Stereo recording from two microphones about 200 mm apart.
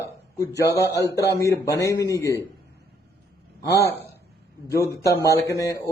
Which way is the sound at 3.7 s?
15° left (ahead or behind).